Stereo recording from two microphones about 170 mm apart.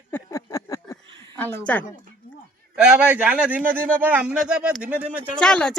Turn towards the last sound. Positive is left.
turn(degrees=5)  # may be behind; listen again after turning